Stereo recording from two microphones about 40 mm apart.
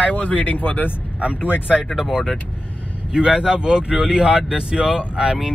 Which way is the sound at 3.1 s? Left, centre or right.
Right.